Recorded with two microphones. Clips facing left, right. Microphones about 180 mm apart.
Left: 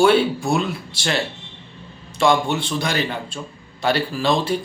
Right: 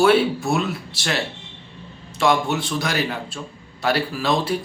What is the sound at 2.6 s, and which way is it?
Speech, 30° left (ahead or behind).